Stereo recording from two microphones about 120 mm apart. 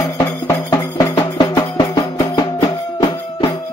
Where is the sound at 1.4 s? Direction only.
40° left (ahead or behind).